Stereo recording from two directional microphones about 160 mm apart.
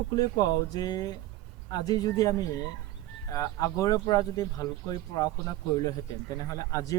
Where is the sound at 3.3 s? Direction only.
20° left (ahead or behind).